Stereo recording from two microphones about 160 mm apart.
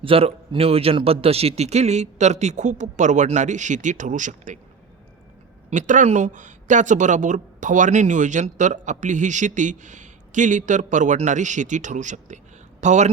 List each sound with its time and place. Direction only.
0.0 s speech: 35° right (ahead or behind)
5.7 s speech: 50° right (ahead or behind)